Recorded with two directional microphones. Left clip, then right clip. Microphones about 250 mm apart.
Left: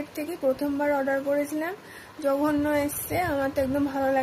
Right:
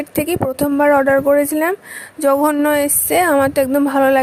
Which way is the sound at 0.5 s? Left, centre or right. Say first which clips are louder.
Right 17 dB; right.